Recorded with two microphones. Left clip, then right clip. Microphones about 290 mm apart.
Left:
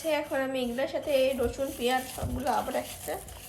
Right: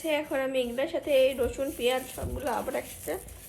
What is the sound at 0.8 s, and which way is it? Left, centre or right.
A woman's voice, centre.